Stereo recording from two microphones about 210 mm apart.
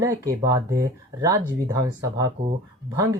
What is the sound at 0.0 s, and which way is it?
Speech, 15° right (ahead or behind).